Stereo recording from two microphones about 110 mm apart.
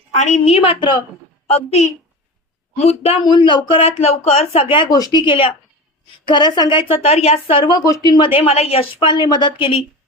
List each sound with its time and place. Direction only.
0.1 s a woman's voice: 90° left; by 1.0 s 45° left (ahead or behind)
1.5 s a woman's voice: 80° left
2.7 s a woman's voice: 70° left (ahead or behind)
3.2 s speech: 45° left (ahead or behind)
5.2 s speech: 50° left (ahead or behind)
7.6 s speech: 40° left (ahead or behind)
8.2 s speech: 55° left (ahead or behind)